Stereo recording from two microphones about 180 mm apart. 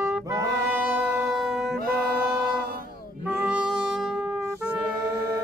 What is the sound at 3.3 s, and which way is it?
Music, 5° right (ahead or behind).